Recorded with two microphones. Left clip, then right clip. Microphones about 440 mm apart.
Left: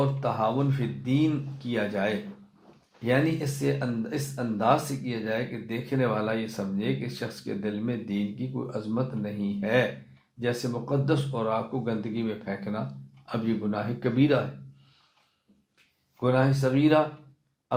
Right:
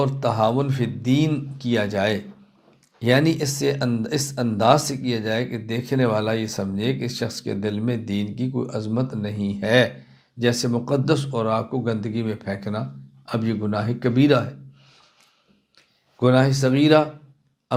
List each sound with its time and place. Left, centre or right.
0.0 s speech: right
16.2 s speech: right